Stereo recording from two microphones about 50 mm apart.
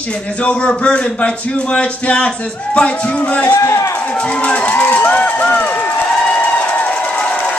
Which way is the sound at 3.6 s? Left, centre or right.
Left.